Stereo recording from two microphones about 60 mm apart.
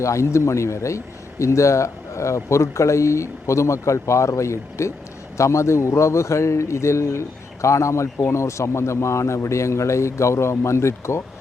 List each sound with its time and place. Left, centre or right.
0.0 s a man's voice: left